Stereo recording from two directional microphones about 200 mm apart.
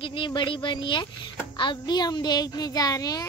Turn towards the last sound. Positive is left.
turn(degrees=20)  # may be behind; listen again after turning